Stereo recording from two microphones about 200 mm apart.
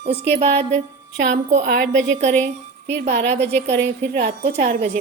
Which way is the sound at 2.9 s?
55° right (ahead or behind).